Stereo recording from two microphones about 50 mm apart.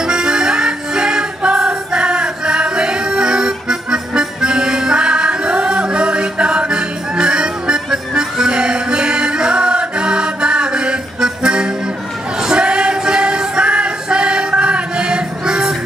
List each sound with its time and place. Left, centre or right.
0.0 s music: centre